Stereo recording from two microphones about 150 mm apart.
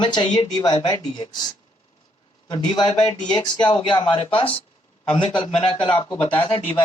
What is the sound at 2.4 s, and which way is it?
A man's voice, 30° left (ahead or behind).